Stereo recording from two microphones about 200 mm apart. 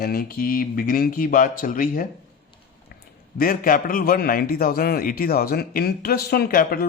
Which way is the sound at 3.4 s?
45° left (ahead or behind).